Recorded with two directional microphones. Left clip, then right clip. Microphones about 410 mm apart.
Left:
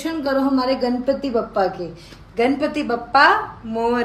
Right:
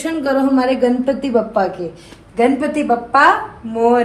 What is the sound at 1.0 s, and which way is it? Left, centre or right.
Speech, right.